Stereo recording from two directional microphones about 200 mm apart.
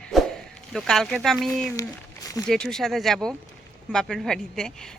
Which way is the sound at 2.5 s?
Centre (ahead or behind).